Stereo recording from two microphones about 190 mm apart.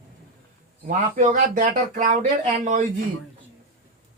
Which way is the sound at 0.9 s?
40° right (ahead or behind).